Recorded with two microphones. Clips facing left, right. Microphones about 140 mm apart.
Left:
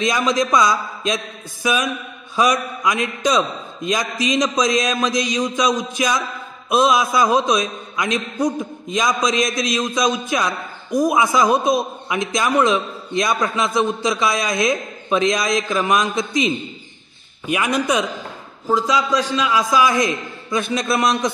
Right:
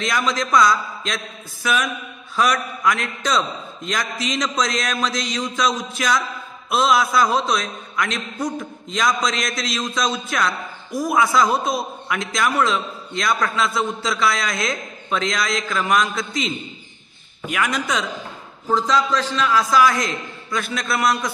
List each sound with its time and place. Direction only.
0.0 s a man's voice: 20° left (ahead or behind)